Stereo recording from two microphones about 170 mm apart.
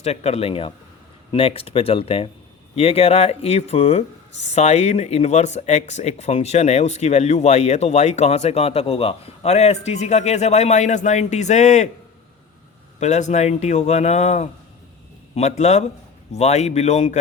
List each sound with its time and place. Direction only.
0.0 s speech: 40° left (ahead or behind)
13.0 s speech: 45° left (ahead or behind)